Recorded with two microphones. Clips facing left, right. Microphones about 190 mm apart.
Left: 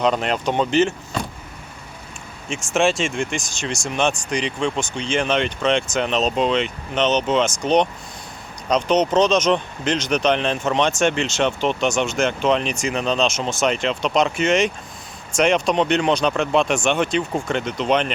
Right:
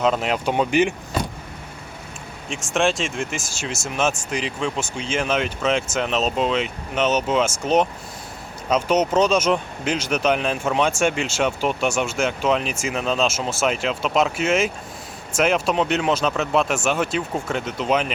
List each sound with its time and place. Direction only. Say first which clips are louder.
0.0 s speech: left 1 dB; 5° right (ahead or behind)
2.5 s speech: left 2 dB; centre (ahead or behind)